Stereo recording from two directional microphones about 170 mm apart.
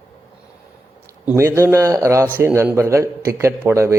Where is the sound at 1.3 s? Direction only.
15° right (ahead or behind).